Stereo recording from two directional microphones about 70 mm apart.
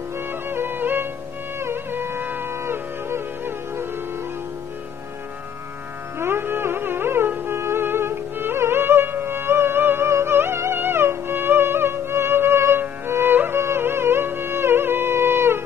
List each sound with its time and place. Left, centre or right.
0.3 s music: right
6.1 s music: right